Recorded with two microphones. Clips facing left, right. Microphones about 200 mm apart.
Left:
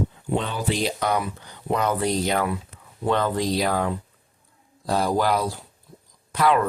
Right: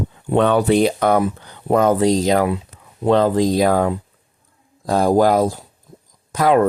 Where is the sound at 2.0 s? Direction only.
90° right.